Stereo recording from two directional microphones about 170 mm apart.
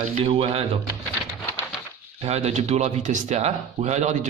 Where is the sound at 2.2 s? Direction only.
40° right (ahead or behind).